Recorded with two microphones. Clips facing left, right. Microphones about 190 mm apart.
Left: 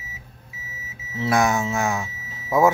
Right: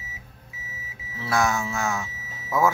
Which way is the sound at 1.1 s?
20° left (ahead or behind).